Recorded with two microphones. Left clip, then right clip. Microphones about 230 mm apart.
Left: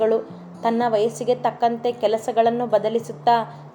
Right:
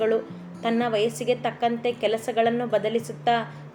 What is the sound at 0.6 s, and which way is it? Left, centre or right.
Speech, left.